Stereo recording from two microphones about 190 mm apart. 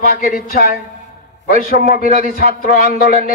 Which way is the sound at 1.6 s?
45° left (ahead or behind).